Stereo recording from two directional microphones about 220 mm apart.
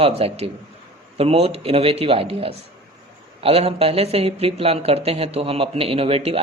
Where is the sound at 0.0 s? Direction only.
25° right (ahead or behind).